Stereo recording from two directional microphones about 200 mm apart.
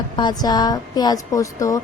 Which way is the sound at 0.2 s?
20° left (ahead or behind).